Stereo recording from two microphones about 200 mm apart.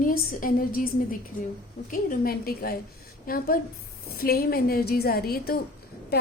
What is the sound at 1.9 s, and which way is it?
A woman's voice, 45° left (ahead or behind).